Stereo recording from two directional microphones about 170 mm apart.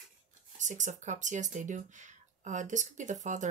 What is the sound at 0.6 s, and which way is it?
Speech, 45° right (ahead or behind).